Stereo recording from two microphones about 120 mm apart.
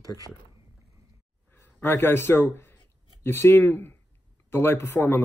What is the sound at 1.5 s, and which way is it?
A man's voice, 20° left (ahead or behind).